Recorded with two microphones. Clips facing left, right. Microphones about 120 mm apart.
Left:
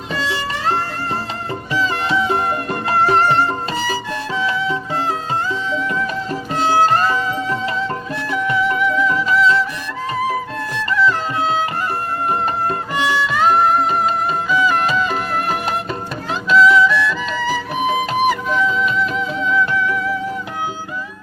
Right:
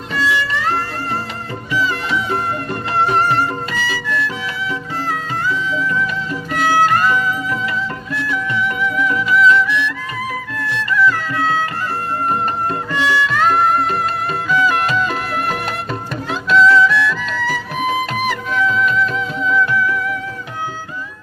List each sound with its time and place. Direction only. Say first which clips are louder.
0.1 s music: right 4 dB; 30° left (ahead or behind)
10.2 s music: left 4 dB; 30° left (ahead or behind)
12.9 s music: right 2 dB; 15° left (ahead or behind)
13.2 s music: left 2 dB; 5° left (ahead or behind)